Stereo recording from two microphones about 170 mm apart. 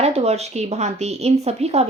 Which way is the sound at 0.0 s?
40° right (ahead or behind).